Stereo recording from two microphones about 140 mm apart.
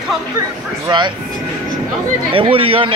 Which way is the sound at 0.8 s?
35° right (ahead or behind).